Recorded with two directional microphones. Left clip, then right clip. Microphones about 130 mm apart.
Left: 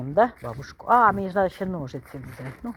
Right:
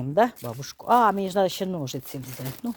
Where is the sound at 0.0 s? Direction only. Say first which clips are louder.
Left 1 dB; 20° right (ahead or behind).